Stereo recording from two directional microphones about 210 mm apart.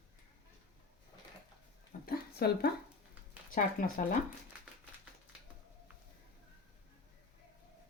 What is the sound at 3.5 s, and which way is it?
Speech, 40° left (ahead or behind).